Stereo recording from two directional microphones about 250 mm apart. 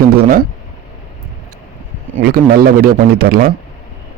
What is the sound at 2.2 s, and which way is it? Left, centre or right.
A man's voice, right.